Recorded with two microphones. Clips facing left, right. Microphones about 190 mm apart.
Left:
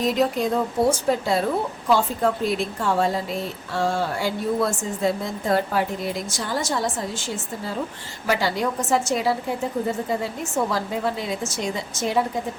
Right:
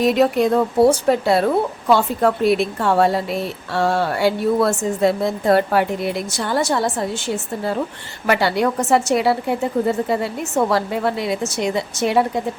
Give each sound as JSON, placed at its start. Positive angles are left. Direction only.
{"t": 0.0, "sound": "a woman's voice", "side_deg": -70}